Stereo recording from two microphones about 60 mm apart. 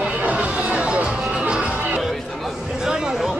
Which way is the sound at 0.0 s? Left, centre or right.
Centre.